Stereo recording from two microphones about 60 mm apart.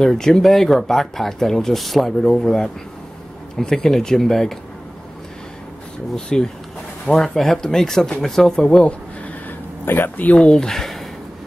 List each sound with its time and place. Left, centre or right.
0.0 s speech: centre
6.1 s speech: centre
8.5 s speech: centre
9.8 s speech: left; by 11.1 s centre